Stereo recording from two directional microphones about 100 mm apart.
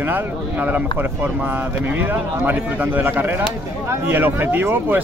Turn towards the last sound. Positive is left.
turn(degrees=-20)  # may be behind; listen again after turning